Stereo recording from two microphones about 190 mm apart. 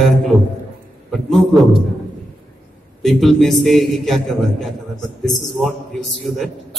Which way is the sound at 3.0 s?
Centre (ahead or behind).